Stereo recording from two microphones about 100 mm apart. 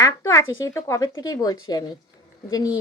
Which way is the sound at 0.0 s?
30° left (ahead or behind).